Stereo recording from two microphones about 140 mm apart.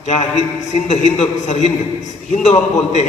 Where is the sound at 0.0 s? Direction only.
55° left (ahead or behind).